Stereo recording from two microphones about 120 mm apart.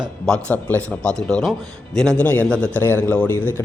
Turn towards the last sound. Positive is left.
turn(degrees=15)  # may be behind; listen again after turning